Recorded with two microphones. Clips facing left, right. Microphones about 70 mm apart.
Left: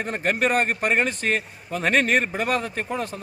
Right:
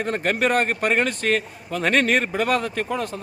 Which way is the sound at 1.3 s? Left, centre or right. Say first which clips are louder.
Right 2 dB; left.